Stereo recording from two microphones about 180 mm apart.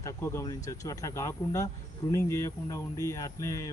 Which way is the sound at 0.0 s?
15° left (ahead or behind).